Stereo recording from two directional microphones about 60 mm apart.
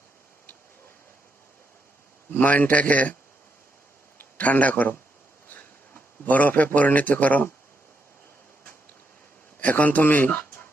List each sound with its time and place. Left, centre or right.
2.3 s a man's voice: left
4.4 s a man's voice: left
9.6 s speech: left